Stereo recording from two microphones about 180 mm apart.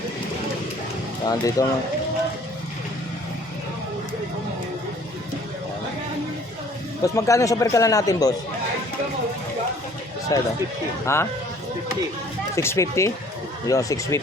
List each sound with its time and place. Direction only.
1.2 s speech: 20° left (ahead or behind)
7.0 s speech: 15° left (ahead or behind)
10.3 s speech: 20° left (ahead or behind)
12.5 s speech: 15° left (ahead or behind)